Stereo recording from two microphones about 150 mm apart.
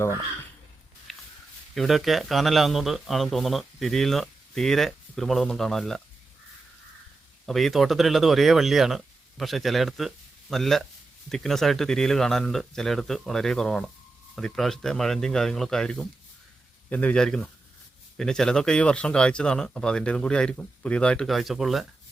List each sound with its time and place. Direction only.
1.1 s a sound: centre (ahead or behind)
1.7 s a man's voice: centre (ahead or behind)
7.4 s a man's voice: centre (ahead or behind)